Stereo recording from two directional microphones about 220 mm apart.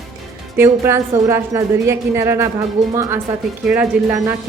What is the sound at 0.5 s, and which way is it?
A woman's voice, 10° right (ahead or behind).